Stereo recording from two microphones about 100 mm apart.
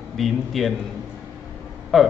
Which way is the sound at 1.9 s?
Centre (ahead or behind).